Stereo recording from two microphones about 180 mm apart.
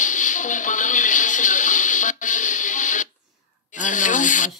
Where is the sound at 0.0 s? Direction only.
45° left (ahead or behind).